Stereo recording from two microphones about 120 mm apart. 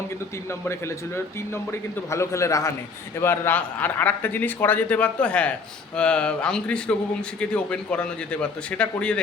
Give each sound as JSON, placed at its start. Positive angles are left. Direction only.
{"t": 0.6, "sound": "a man's voice", "side_deg": 20}